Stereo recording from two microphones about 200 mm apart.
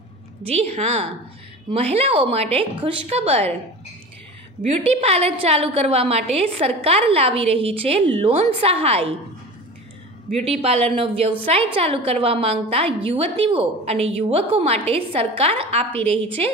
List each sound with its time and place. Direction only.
0.5 s a woman's voice: 30° right (ahead or behind)
4.6 s a woman's voice: 30° right (ahead or behind)
10.3 s a woman's voice: 30° right (ahead or behind)